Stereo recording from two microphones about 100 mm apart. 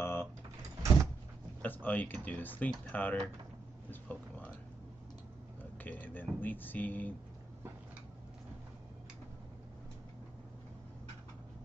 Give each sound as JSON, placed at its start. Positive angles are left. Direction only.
{"t": 0.0, "sound": "door", "side_deg": 25}
{"t": 1.6, "sound": "speech", "side_deg": 15}
{"t": 3.9, "sound": "a sound", "side_deg": 15}
{"t": 5.6, "sound": "speech", "side_deg": 20}